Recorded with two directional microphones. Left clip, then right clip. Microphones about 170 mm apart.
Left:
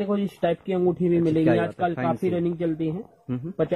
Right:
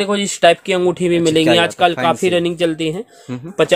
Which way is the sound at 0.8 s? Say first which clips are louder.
Right 5 dB; 25° right (ahead or behind).